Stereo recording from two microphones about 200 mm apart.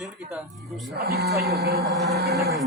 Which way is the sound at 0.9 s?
50° right (ahead or behind).